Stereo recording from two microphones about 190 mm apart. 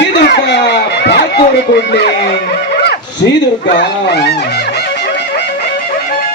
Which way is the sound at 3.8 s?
60° left (ahead or behind).